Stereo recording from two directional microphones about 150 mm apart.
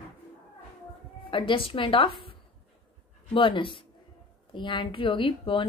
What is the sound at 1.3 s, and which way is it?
A woman's voice, 35° left (ahead or behind).